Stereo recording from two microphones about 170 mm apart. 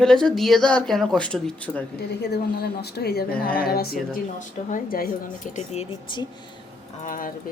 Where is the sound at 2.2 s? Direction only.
70° left (ahead or behind).